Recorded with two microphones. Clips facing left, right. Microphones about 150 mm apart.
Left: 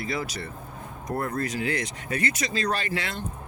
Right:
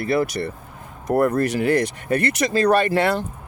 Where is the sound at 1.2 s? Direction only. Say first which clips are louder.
Right 10 dB; 70° right (ahead or behind).